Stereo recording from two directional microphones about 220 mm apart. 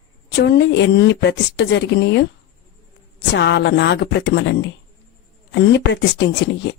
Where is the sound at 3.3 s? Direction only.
50° left (ahead or behind).